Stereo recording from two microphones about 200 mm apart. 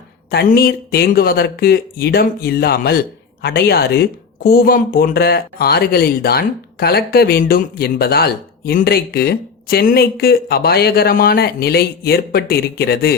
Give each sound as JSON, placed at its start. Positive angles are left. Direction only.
{"t": 0.3, "sound": "speech", "side_deg": 50}